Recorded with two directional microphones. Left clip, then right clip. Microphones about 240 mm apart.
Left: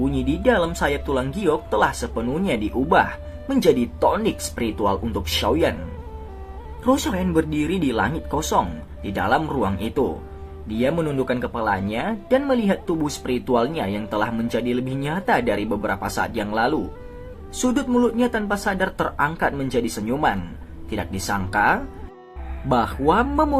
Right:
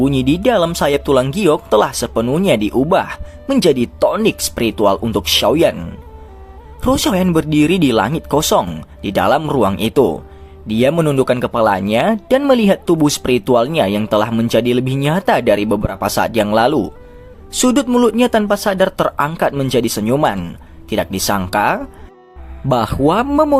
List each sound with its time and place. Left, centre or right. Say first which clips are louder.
0.0 s speech: right 6 dB; right
6.8 s speech: right 6 dB; right